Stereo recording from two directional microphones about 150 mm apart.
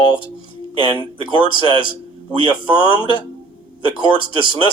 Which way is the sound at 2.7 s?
35° left (ahead or behind).